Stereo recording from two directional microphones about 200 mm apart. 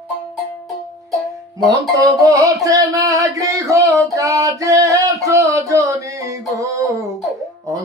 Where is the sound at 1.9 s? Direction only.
15° right (ahead or behind).